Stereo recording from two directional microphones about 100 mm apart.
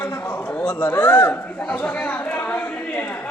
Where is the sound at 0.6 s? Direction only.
20° left (ahead or behind).